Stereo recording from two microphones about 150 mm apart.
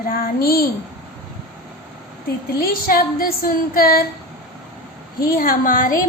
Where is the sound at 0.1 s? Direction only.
80° left.